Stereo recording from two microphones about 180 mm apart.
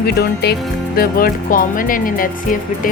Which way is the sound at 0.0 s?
65° left (ahead or behind).